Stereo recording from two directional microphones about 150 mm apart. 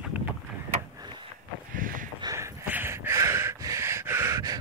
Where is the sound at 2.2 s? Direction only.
20° right (ahead or behind).